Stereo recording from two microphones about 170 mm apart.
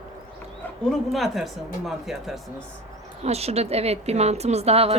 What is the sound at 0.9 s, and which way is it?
Speech, centre (ahead or behind).